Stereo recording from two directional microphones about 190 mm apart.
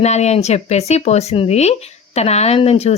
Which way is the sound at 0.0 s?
35° left (ahead or behind).